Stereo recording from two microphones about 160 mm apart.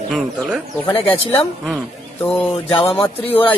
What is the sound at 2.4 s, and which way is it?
Music, 35° left (ahead or behind).